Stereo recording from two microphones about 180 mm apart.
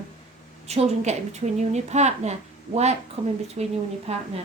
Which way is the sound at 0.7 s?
35° right (ahead or behind).